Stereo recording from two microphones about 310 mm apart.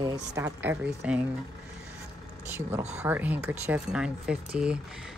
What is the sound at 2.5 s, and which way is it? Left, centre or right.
Speech, centre.